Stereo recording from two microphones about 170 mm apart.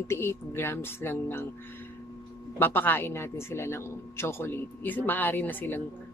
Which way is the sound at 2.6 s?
10° left (ahead or behind).